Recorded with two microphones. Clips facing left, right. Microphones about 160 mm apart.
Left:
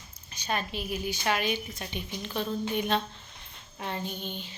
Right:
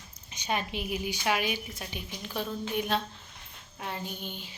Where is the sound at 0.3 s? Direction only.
15° right (ahead or behind).